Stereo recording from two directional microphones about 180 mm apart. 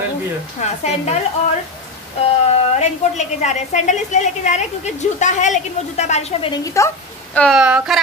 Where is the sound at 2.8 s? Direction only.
40° left (ahead or behind).